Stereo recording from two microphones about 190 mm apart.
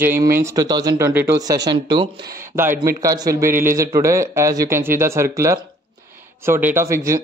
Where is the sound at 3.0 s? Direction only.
15° right (ahead or behind).